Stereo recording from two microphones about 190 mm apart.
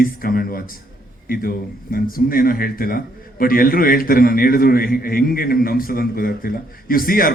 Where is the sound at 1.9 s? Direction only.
50° left (ahead or behind).